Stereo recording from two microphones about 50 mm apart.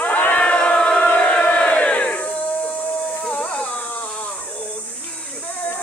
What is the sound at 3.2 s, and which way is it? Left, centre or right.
Carnatic music, left.